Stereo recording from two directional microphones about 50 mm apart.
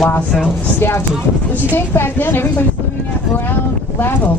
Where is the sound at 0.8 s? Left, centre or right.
Left.